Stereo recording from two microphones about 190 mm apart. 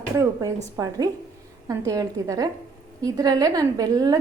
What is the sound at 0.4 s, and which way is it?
A woman's voice, 20° right (ahead or behind).